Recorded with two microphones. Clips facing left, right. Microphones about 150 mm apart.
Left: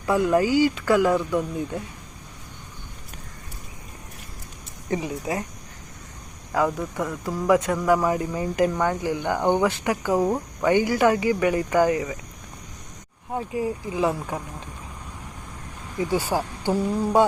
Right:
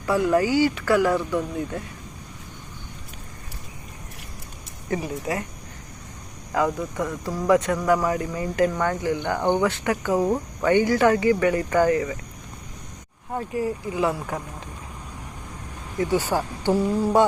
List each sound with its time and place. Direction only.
0.0 s speech: 20° left (ahead or behind)
4.9 s speech: 20° left (ahead or behind)
6.5 s speech: 10° left (ahead or behind)
13.3 s speech: 15° left (ahead or behind)
16.1 s speech: 10° left (ahead or behind)